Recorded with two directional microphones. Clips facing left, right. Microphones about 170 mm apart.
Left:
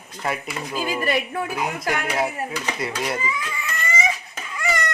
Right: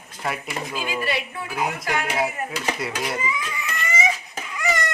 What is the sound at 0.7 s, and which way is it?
Speech, 40° left (ahead or behind).